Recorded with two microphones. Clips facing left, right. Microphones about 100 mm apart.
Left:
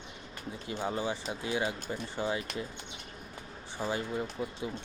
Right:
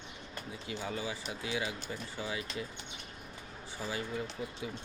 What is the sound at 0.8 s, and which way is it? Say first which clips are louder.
Speech: left 6 dB; 30° left (ahead or behind).